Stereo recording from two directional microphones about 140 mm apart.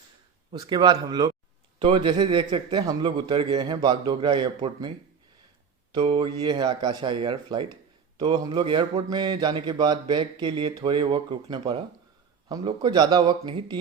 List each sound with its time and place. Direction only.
0.5 s a man's voice: 30° right (ahead or behind)
1.8 s a man's voice: 40° right (ahead or behind)
6.0 s a man's voice: 45° right (ahead or behind)
12.5 s a man's voice: 30° right (ahead or behind)